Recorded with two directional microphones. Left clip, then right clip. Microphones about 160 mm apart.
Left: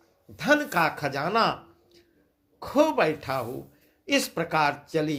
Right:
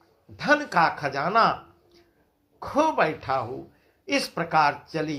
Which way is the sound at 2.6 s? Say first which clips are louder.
Even; 40° left (ahead or behind).